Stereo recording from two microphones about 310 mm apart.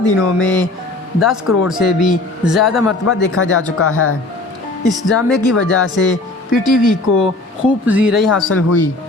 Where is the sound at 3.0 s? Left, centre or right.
Left.